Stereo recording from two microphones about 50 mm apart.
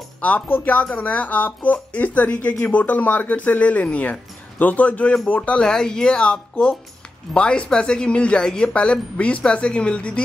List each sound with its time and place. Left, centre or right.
0.5 s speech: left
5.6 s speech: centre